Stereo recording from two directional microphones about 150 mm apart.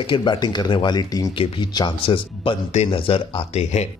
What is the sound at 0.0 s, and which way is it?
Speech, 30° left (ahead or behind).